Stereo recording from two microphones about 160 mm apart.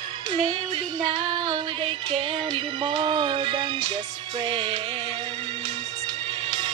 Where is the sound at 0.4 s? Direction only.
40° right (ahead or behind).